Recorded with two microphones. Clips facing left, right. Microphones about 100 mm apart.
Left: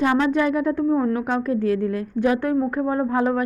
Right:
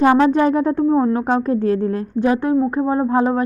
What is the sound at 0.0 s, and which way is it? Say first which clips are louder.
A woman's voice: right 6 dB; 35° right (ahead or behind).